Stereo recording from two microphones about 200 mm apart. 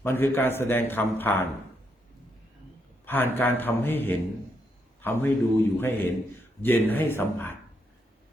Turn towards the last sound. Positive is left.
turn(degrees=10)  # may be behind; listen again after turning